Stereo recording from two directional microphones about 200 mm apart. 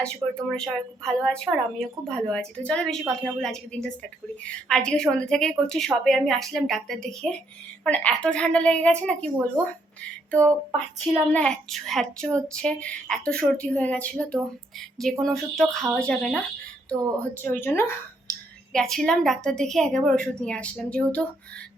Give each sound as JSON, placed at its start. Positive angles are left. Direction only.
{"t": 0.0, "sound": "a woman's voice", "side_deg": 5}
{"t": 11.3, "sound": "a woman's voice", "side_deg": 5}